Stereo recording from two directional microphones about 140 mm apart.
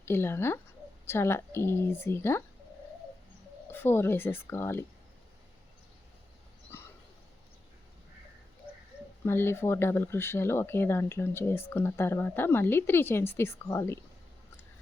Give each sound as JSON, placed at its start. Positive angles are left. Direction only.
{"t": 0.0, "sound": "speech", "side_deg": 15}
{"t": 3.7, "sound": "speech", "side_deg": 15}
{"t": 9.2, "sound": "speech", "side_deg": 15}